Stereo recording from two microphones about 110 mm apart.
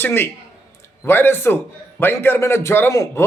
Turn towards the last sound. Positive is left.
turn(degrees=25)  # may be behind; listen again after turning